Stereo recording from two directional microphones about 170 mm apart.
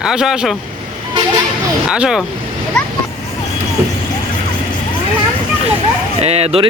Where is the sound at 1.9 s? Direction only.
5° right (ahead or behind).